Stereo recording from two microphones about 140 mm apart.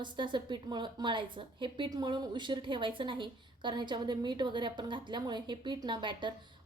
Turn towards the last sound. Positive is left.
turn(degrees=-35)  # may be behind; listen again after turning